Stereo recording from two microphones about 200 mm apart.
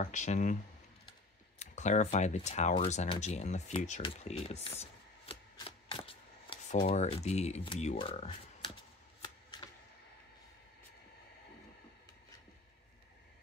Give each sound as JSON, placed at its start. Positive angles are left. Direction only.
{"t": 0.0, "sound": "speech", "side_deg": 40}
{"t": 1.6, "sound": "speech", "side_deg": 35}
{"t": 9.2, "sound": "shuffling cards", "side_deg": 25}